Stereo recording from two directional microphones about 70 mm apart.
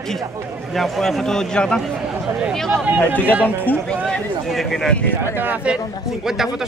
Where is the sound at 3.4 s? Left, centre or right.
Left.